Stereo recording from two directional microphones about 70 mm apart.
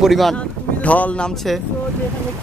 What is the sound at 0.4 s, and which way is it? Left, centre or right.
Speech, left.